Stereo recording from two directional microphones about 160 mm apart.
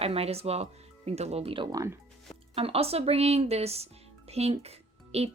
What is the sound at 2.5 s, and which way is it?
Speech, 40° right (ahead or behind).